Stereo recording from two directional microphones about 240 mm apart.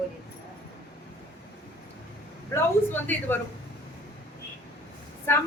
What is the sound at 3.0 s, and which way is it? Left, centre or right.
Speech, centre.